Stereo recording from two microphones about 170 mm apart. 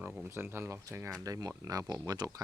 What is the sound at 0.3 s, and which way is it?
Speech, 15° right (ahead or behind).